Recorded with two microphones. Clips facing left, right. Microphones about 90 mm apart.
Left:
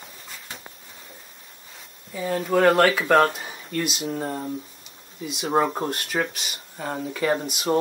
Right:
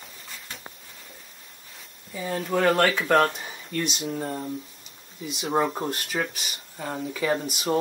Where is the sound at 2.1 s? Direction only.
Centre (ahead or behind).